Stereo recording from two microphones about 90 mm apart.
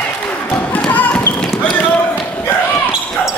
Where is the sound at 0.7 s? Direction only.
15° left (ahead or behind).